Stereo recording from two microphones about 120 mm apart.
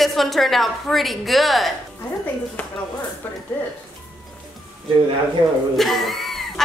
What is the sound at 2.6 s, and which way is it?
Speech, 15° left (ahead or behind).